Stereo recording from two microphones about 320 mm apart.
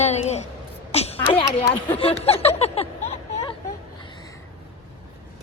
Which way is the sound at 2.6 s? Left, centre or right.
Centre.